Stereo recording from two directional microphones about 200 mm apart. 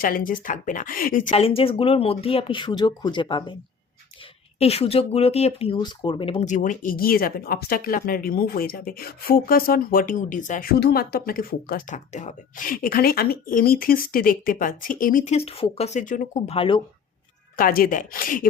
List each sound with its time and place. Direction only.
0.0 s a woman's voice: 45° left (ahead or behind); by 3.5 s 25° left (ahead or behind)
4.6 s speech: 30° left (ahead or behind)
17.6 s speech: 45° left (ahead or behind)